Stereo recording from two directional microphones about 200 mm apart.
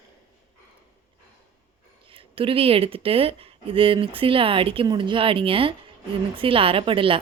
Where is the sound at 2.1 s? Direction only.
25° right (ahead or behind).